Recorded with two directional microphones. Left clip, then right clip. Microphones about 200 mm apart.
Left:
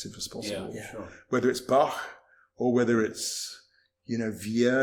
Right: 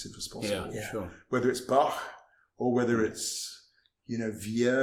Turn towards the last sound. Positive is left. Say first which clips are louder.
# left 2 dB
turn(degrees=30)  # may be behind; listen again after turning